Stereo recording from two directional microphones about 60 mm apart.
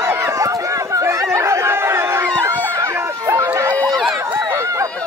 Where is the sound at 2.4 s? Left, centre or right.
Right.